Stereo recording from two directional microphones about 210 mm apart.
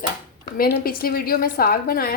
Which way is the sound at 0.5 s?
45° left (ahead or behind).